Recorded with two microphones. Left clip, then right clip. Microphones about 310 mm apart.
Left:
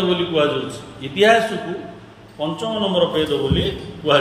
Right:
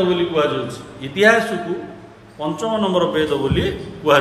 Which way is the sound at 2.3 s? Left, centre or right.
Centre.